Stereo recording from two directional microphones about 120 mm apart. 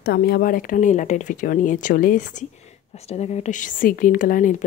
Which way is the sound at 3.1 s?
65° left (ahead or behind).